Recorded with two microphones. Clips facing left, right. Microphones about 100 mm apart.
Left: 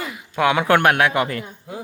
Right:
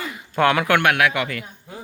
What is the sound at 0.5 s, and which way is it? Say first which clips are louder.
Speech: left 2 dB; 30° left (ahead or behind).